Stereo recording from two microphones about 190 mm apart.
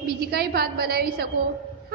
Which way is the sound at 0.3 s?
55° right (ahead or behind).